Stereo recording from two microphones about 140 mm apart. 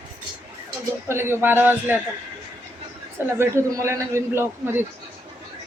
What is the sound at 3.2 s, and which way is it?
A man's voice, 20° right (ahead or behind).